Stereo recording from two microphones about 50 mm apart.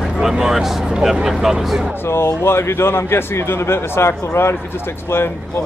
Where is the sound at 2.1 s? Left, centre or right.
Left.